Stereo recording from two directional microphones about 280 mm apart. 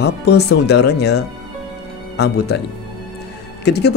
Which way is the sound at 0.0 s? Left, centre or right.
Left.